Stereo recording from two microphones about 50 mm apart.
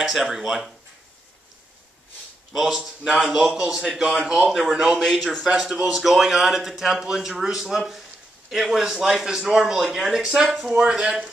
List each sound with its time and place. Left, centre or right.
0.0 s speech: centre
2.5 s a man's voice: centre